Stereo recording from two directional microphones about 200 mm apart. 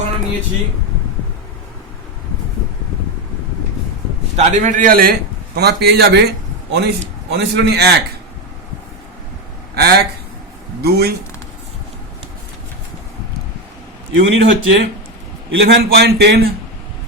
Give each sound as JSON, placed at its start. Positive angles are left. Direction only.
{"t": 4.4, "sound": "a man's voice", "side_deg": -40}
{"t": 9.7, "sound": "speech", "side_deg": -55}
{"t": 14.1, "sound": "a man's voice", "side_deg": -70}